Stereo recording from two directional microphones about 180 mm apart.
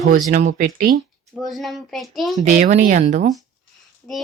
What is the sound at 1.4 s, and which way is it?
Speech, centre (ahead or behind).